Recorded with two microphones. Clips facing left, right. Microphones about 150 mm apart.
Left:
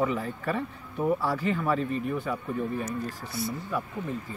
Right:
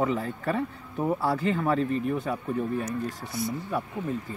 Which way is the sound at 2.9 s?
15° right (ahead or behind).